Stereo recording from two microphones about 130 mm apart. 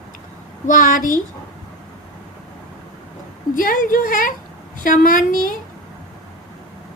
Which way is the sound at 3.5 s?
90° left.